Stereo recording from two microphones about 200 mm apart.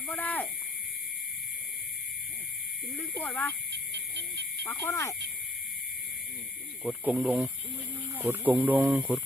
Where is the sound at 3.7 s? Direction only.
60° right (ahead or behind).